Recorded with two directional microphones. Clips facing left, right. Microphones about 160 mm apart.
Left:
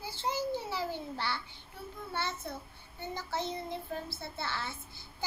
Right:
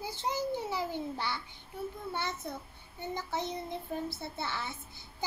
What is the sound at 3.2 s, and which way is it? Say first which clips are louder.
A child's voice: even; 20° right (ahead or behind).